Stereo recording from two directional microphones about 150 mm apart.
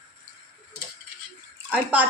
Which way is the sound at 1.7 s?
10° right (ahead or behind).